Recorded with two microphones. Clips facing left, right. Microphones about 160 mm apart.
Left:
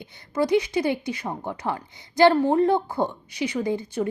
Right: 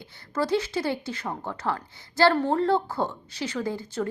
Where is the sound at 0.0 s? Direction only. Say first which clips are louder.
Left 4 dB; 15° left (ahead or behind).